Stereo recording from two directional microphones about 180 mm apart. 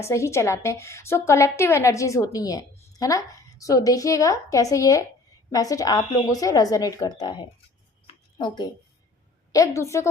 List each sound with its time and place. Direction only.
0.0 s a woman's voice: 15° left (ahead or behind)
8.0 s a sound: 25° left (ahead or behind)
9.5 s a woman's voice: 15° left (ahead or behind)